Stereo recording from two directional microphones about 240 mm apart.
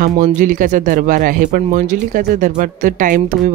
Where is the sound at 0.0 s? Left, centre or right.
Right.